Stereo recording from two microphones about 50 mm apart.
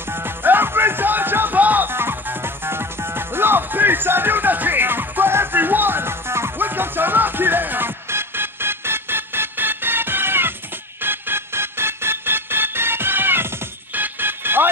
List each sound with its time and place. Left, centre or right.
0.1 s music: right
6.6 s music: right
8.1 s music: right